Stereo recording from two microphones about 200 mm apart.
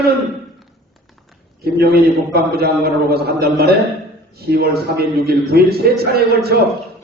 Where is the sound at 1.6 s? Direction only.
50° right (ahead or behind).